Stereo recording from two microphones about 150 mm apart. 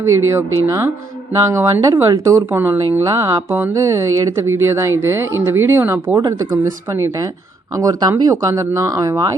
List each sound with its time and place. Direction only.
0.0 s speech: 20° right (ahead or behind)